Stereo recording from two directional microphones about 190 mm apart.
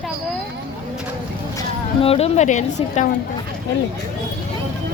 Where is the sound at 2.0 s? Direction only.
30° left (ahead or behind).